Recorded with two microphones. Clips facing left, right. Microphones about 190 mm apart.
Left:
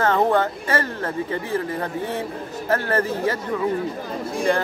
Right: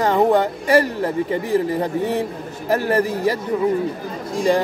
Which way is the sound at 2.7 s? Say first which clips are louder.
Right 3 dB; 15° right (ahead or behind).